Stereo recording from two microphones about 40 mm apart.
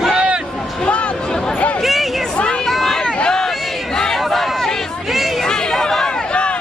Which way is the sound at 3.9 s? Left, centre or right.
Centre.